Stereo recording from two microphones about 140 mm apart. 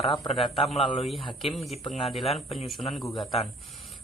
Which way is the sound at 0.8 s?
40° left (ahead or behind).